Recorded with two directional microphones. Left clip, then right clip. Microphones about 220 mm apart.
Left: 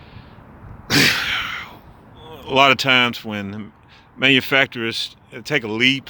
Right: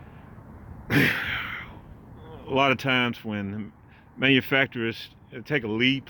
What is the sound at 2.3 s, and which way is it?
Speech, 15° left (ahead or behind).